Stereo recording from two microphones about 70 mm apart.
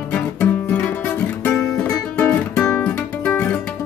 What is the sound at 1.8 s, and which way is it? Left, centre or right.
Music, left.